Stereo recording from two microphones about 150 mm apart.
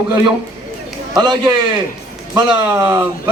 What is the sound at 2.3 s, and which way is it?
Speech, 15° right (ahead or behind).